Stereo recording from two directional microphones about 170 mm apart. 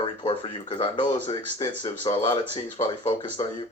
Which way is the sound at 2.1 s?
30° left (ahead or behind).